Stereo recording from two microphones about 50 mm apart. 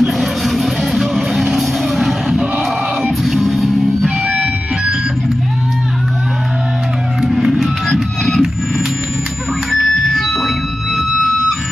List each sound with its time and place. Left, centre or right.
0.0 s music: centre
4.3 s a sound: right
7.2 s music: centre
9.7 s music: centre